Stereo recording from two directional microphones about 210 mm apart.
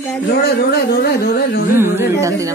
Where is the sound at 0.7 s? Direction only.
45° left (ahead or behind).